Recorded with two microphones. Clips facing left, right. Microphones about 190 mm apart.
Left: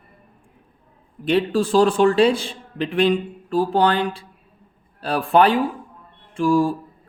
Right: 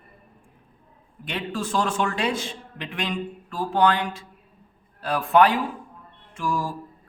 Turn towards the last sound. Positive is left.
turn(degrees=30)  # may be behind; listen again after turning